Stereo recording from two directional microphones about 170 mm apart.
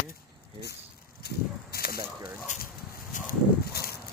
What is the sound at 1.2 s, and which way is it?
Walk, 65° left (ahead or behind).